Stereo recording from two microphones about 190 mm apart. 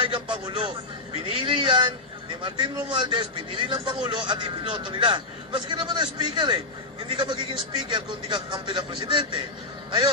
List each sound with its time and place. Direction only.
0.0 s a man's voice: 25° right (ahead or behind)